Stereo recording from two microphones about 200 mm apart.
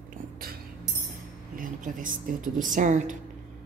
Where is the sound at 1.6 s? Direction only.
40° right (ahead or behind).